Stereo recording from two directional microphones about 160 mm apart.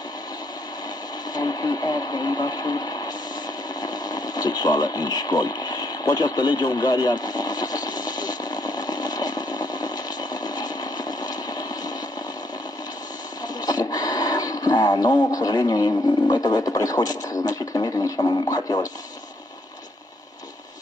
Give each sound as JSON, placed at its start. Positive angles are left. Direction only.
{"t": 1.3, "sound": "speech", "side_deg": 25}
{"t": 3.8, "sound": "radio", "side_deg": 25}
{"t": 13.6, "sound": "speech", "side_deg": 25}